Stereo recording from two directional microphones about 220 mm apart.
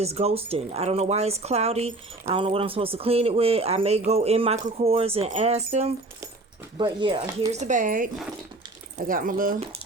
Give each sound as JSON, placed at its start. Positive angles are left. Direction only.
{"t": 0.0, "sound": "speech", "side_deg": -30}